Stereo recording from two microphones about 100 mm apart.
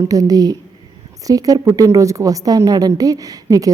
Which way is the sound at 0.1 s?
35° right (ahead or behind).